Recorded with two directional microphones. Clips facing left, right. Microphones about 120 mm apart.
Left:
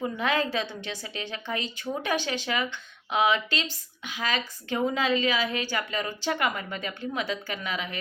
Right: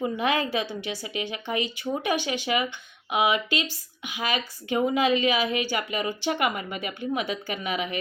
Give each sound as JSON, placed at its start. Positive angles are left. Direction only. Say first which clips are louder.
{"t": 0.0, "sound": "a woman's voice", "louder": "right 2 dB", "side_deg": -15}